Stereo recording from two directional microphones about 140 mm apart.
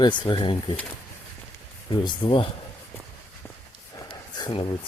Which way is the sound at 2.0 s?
35° left (ahead or behind).